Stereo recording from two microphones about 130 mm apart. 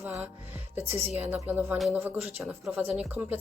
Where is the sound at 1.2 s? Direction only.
15° right (ahead or behind).